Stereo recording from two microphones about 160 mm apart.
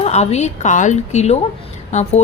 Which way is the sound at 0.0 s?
45° left (ahead or behind).